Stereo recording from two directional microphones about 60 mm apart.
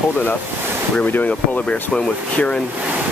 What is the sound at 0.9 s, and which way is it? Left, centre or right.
Speech, left.